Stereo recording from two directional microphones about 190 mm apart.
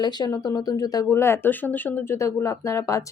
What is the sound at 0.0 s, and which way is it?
Speech, 20° left (ahead or behind).